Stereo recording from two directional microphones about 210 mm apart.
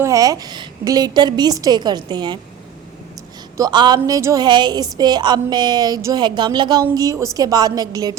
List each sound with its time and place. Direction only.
0.0 s speech: 15° right (ahead or behind)
3.6 s speech: 20° right (ahead or behind)